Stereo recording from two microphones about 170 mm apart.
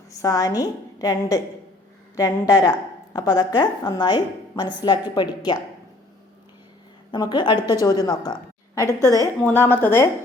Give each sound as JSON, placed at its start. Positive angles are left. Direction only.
{"t": 0.1, "sound": "a woman's voice", "side_deg": 20}
{"t": 7.1, "sound": "a woman's voice", "side_deg": 25}
{"t": 8.9, "sound": "a woman's voice", "side_deg": -20}
{"t": 9.4, "sound": "a woman's voice", "side_deg": 10}